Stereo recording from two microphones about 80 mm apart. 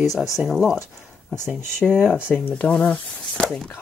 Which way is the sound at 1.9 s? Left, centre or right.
Centre.